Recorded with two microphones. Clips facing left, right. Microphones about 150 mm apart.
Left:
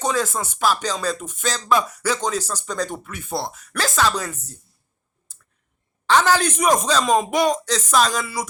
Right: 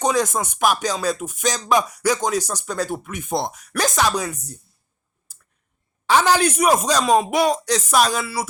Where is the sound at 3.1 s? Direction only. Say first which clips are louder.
Right 3 dB; 20° right (ahead or behind).